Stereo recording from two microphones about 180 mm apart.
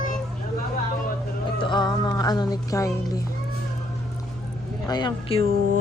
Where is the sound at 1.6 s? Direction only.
25° left (ahead or behind).